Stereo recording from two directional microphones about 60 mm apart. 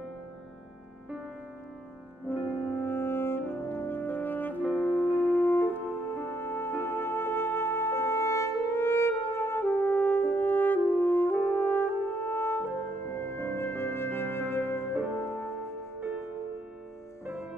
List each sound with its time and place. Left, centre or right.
2.2 s brass instrument: left
4.7 s music: left